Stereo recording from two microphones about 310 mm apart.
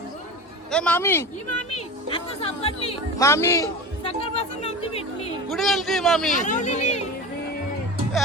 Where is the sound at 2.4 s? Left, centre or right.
Centre.